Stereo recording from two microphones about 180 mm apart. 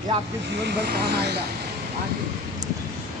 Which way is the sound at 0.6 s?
60° right (ahead or behind).